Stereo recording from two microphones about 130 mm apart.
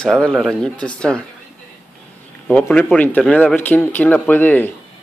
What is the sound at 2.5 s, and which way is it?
Speech, 10° left (ahead or behind).